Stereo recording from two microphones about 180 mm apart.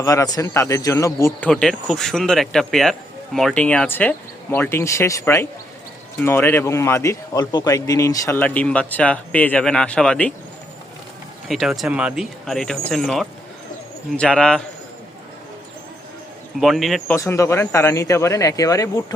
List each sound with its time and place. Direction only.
0.0 s speech: 20° left (ahead or behind)
1.5 s speech: 5° left (ahead or behind)
11.4 s speech: centre (ahead or behind)
16.6 s speech: centre (ahead or behind)
17.2 s speech: 15° left (ahead or behind)